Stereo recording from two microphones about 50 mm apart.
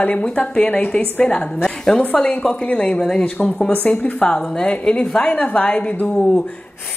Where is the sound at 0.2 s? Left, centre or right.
Centre.